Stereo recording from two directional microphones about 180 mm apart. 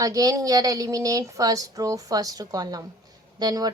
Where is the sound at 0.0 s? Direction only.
20° right (ahead or behind).